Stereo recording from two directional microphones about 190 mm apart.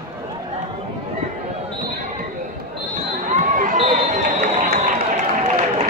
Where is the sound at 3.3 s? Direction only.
40° right (ahead or behind).